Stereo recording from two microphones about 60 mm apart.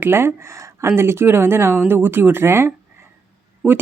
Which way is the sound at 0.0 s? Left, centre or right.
Right.